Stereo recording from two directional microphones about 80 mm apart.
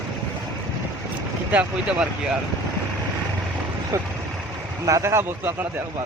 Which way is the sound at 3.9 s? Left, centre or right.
Right.